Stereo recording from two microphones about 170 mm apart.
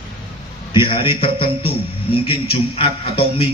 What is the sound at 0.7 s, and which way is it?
A man's voice, 30° left (ahead or behind).